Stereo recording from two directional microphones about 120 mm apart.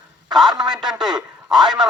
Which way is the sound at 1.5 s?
35° right (ahead or behind).